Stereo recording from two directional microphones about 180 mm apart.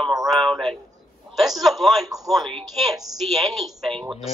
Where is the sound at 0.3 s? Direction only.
Centre (ahead or behind).